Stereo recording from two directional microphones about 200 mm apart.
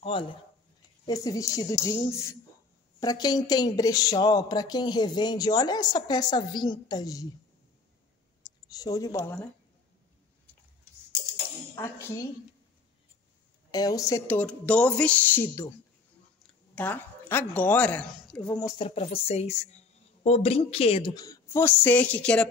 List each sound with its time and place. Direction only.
0.0 s a woman's voice: 25° left (ahead or behind)
8.7 s a woman's voice: 15° left (ahead or behind)
11.7 s a woman's voice: 15° left (ahead or behind)
13.7 s a woman's voice: 20° left (ahead or behind)
16.7 s a woman's voice: 10° left (ahead or behind)
18.8 s a woman's voice: 30° left (ahead or behind); by 22.5 s 5° left (ahead or behind)